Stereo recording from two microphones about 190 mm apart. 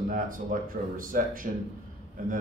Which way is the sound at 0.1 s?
45° right (ahead or behind).